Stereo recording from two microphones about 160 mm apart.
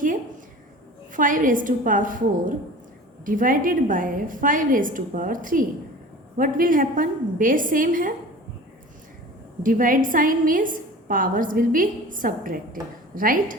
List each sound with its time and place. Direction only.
1.1 s a woman's voice: 55° right (ahead or behind)
9.6 s a woman's voice: 55° right (ahead or behind)